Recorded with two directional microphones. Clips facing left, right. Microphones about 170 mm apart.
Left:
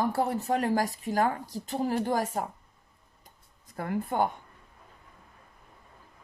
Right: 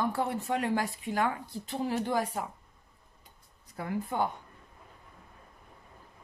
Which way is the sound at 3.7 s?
50° left (ahead or behind).